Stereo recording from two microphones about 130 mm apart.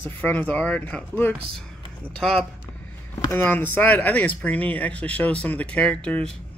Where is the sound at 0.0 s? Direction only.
15° left (ahead or behind).